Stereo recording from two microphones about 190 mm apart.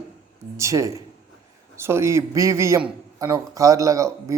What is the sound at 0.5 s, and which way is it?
A man's voice, 15° right (ahead or behind).